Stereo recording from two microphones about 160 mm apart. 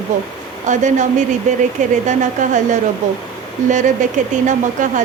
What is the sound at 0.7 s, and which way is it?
Speech, 50° right (ahead or behind).